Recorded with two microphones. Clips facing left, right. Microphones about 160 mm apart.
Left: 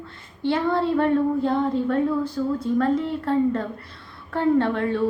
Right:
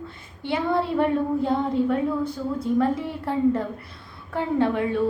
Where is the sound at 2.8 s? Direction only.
15° right (ahead or behind).